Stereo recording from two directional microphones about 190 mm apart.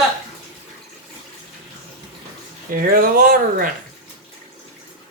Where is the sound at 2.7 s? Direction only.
50° right (ahead or behind).